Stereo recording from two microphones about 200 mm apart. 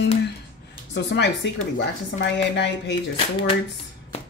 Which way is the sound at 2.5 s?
60° left (ahead or behind).